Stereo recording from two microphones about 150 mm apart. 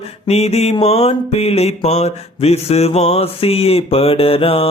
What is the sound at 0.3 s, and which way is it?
Mantra, 45° left (ahead or behind).